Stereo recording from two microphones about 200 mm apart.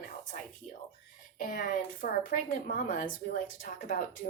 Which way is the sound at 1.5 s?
40° left (ahead or behind).